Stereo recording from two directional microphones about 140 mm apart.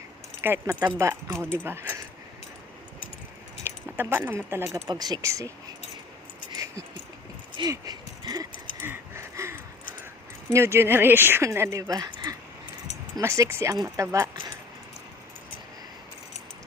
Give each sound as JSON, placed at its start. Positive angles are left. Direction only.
{"t": 0.4, "sound": "a woman's voice", "side_deg": -15}
{"t": 1.6, "sound": "keys jangling", "side_deg": -15}
{"t": 3.6, "sound": "speech", "side_deg": -15}
{"t": 4.9, "sound": "speech", "side_deg": -30}
{"t": 6.5, "sound": "dog", "side_deg": -25}
{"t": 7.5, "sound": "a sound", "side_deg": -30}
{"t": 10.5, "sound": "a woman's voice", "side_deg": -20}